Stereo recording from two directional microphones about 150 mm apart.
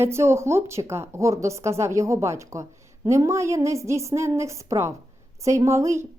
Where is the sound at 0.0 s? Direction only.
15° right (ahead or behind).